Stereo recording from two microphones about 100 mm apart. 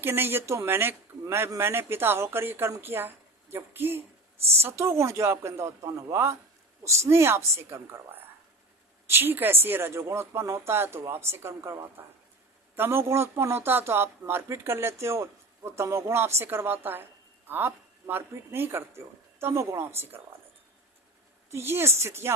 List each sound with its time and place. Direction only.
0.0 s a man's voice: 25° right (ahead or behind)
21.5 s a man's voice: 25° right (ahead or behind)